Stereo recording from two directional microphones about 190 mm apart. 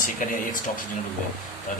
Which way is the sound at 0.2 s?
45° left (ahead or behind).